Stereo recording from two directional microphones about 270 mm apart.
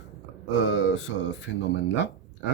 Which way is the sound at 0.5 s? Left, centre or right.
Left.